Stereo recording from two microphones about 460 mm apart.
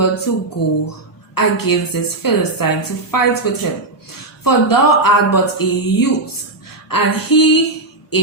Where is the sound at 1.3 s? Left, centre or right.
Left.